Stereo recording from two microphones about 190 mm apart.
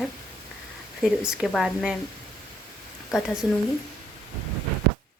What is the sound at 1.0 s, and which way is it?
Speech, 5° right (ahead or behind).